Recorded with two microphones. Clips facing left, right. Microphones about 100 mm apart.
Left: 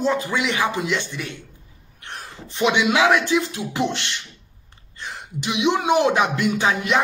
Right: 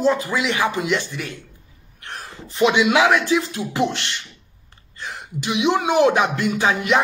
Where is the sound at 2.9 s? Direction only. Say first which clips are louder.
Right 1 dB; 35° right (ahead or behind).